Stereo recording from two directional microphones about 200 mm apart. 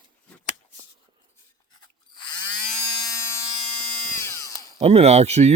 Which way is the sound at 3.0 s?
15° left (ahead or behind).